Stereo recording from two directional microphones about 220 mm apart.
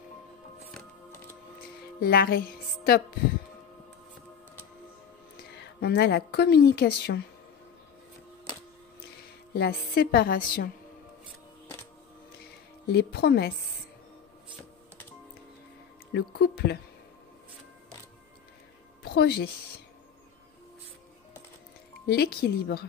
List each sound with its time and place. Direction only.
0.7 s music: 5° left (ahead or behind)
2.0 s a woman's voice: 45° left (ahead or behind)
5.4 s a woman's voice: 50° left (ahead or behind)
9.5 s a woman's voice: 45° left (ahead or behind)
12.8 s a woman's voice: 50° left (ahead or behind)
16.1 s a woman's voice: 50° left (ahead or behind)
19.0 s a woman's voice: 45° left (ahead or behind)
22.0 s a woman's voice: 45° left (ahead or behind)